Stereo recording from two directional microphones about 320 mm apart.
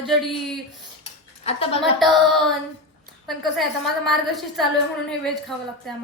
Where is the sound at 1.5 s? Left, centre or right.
Centre.